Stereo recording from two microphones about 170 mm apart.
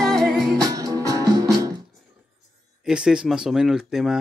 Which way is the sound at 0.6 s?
20° right (ahead or behind).